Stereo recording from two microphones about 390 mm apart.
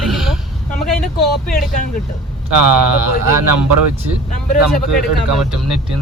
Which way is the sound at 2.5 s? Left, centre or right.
Right.